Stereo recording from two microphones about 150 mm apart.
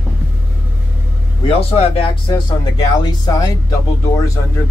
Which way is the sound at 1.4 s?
40° left (ahead or behind).